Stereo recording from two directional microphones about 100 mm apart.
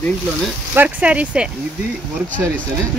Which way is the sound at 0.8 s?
15° right (ahead or behind).